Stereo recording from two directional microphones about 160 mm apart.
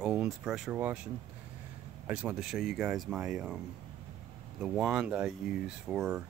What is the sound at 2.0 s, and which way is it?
Speech, 10° right (ahead or behind).